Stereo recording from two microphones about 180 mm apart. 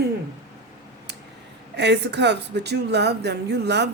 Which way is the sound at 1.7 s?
70° right (ahead or behind).